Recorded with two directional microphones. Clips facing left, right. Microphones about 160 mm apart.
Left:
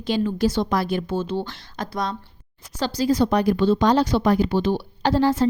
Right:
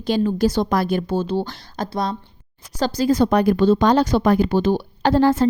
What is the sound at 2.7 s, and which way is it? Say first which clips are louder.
A woman's voice: right 3 dB; 45° right (ahead or behind).